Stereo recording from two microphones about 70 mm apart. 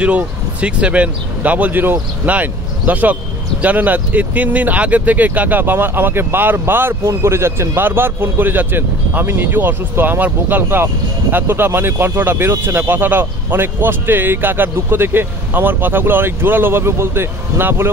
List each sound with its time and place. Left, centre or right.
0.0 s speech: centre; by 17.8 s right